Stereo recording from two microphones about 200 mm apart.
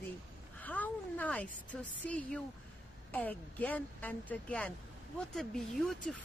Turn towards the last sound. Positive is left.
turn(degrees=5)  # may be behind; listen again after turning